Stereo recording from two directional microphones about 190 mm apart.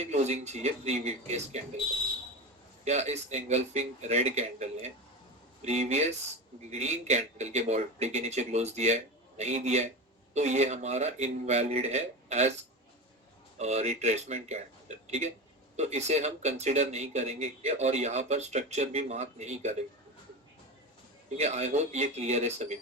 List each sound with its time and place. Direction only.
0.0 s speech: 35° right (ahead or behind)
2.8 s speech: 35° right (ahead or behind)
13.6 s speech: 35° right (ahead or behind)
21.3 s speech: 35° right (ahead or behind)